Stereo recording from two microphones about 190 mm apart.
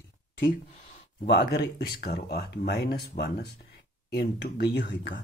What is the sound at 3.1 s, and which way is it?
Speech, 40° left (ahead or behind).